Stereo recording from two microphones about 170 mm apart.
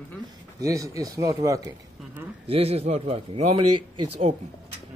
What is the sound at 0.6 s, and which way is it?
Speech, 20° right (ahead or behind).